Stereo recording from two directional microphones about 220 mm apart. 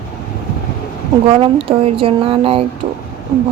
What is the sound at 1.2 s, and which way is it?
Speech, 25° right (ahead or behind).